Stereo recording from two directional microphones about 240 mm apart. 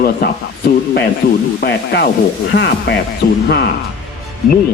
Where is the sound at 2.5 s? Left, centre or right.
Left.